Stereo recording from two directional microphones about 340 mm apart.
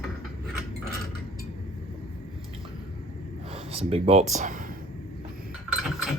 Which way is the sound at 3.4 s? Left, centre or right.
Centre.